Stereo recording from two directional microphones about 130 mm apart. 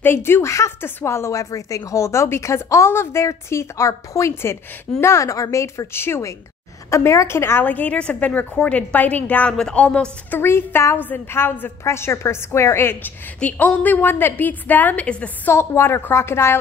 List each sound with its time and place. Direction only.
0.0 s a woman's voice: 20° left (ahead or behind)